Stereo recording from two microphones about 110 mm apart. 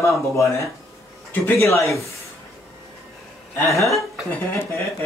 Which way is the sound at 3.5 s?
25° left (ahead or behind).